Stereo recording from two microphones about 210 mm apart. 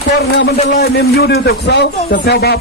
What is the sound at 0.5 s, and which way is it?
Speech, 35° left (ahead or behind).